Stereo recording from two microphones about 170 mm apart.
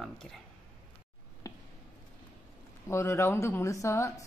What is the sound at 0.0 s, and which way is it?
Speech, centre (ahead or behind).